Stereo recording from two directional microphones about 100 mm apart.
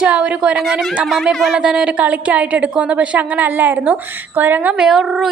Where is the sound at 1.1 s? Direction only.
Centre (ahead or behind); by 4.7 s 20° right (ahead or behind).